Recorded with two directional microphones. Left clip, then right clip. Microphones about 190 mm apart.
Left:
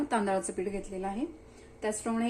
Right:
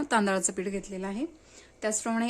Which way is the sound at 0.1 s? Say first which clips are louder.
Right 6 dB; 45° right (ahead or behind).